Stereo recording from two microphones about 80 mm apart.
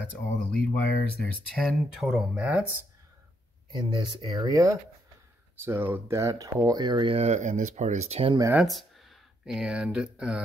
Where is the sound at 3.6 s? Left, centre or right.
Right.